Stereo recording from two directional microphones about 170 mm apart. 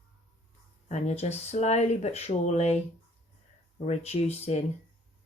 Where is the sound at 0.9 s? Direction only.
40° left (ahead or behind).